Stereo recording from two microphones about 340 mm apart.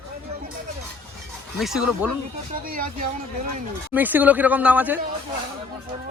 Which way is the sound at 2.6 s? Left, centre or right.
Right.